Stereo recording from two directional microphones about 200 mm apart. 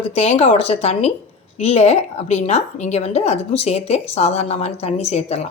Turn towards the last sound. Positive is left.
turn(degrees=35)  # may be behind; listen again after turning